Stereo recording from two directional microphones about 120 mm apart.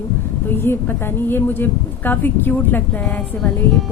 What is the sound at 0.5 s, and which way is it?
Speech, 20° left (ahead or behind).